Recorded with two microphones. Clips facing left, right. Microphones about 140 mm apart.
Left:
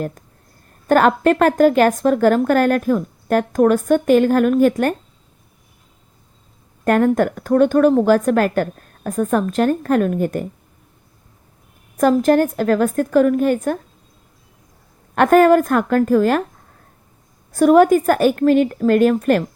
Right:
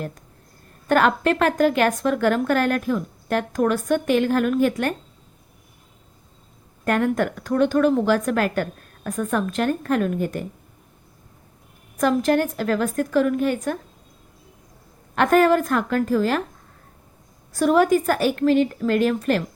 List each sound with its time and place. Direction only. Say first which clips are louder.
0.9 s a woman's voice: left 5 dB; 40° left (ahead or behind)
6.8 s a woman's voice: left 6 dB; 45° left (ahead or behind)
11.9 s a woman's voice: left 5 dB; 45° left (ahead or behind)
15.1 s a woman's voice: left 5 dB; 50° left (ahead or behind)
17.5 s a woman's voice: left 6 dB; 50° left (ahead or behind)